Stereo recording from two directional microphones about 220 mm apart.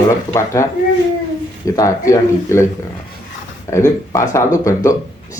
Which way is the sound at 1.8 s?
15° left (ahead or behind).